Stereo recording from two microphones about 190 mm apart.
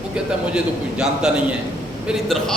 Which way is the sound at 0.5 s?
5° right (ahead or behind).